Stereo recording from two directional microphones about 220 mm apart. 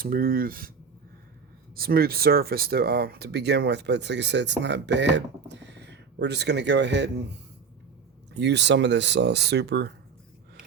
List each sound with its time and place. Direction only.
0.0 s speech: 40° right (ahead or behind)
1.7 s speech: 45° right (ahead or behind)
8.3 s speech: 50° right (ahead or behind)